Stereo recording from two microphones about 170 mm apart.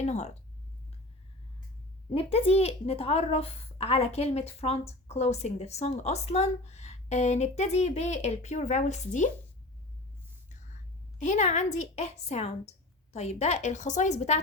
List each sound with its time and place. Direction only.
0.0 s a woman's voice: 40° left (ahead or behind)
2.0 s a woman's voice: 35° left (ahead or behind)
10.5 s whispering: 45° left (ahead or behind)
11.2 s a woman's voice: 45° left (ahead or behind)